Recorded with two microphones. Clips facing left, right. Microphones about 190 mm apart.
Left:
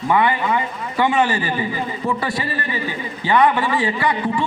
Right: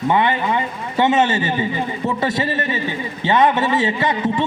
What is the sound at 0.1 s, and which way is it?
A man's voice, 25° right (ahead or behind).